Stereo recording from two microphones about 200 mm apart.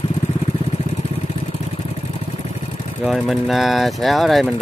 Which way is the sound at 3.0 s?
Centre (ahead or behind).